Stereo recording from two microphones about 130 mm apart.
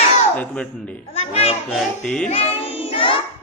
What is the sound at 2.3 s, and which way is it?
Child singing, 50° left (ahead or behind).